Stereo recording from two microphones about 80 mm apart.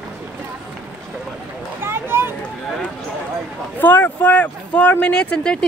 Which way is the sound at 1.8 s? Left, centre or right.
Right.